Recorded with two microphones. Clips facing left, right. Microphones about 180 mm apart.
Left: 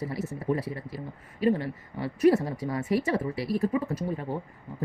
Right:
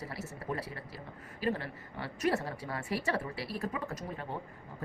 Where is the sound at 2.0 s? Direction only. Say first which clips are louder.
Left 10 dB; 25° left (ahead or behind).